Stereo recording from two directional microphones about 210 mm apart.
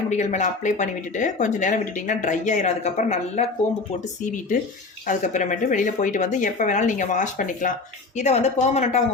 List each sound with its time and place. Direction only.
0.1 s speech: 35° left (ahead or behind)